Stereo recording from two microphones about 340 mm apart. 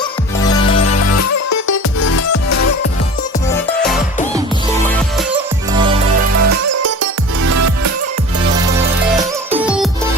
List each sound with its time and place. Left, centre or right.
0.8 s music: left
5.7 s music: centre
6.3 s music: right
9.6 s music: centre